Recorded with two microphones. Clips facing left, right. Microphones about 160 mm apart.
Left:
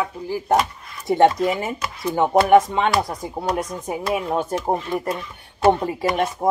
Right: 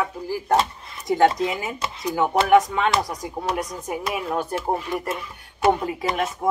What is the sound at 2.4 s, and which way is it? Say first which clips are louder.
Speech: left 2 dB; 25° left (ahead or behind).